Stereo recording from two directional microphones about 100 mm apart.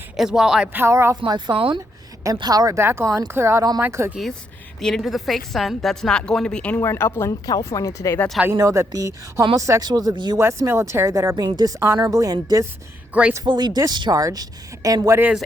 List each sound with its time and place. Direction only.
0.2 s a woman's voice: 5° right (ahead or behind)
0.7 s speech: 25° right (ahead or behind)
1.1 s speech: 45° right (ahead or behind)
2.2 s a woman's voice: 40° right (ahead or behind)
2.7 s speech: 25° right (ahead or behind)
4.8 s a woman's voice: 5° left (ahead or behind)
6.8 s speech: 25° left (ahead or behind)
8.5 s a woman's voice: 30° right (ahead or behind)
10.3 s speech: 25° right (ahead or behind)
11.4 s a woman's voice: 45° right (ahead or behind)
13.4 s a woman's voice: 50° right (ahead or behind)